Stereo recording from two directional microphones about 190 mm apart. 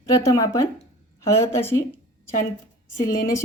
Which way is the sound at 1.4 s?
15° left (ahead or behind).